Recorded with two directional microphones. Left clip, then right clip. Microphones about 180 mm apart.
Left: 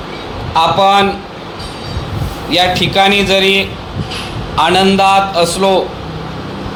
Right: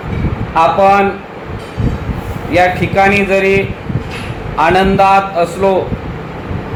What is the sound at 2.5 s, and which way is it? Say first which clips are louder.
Speech: even; 35° left (ahead or behind).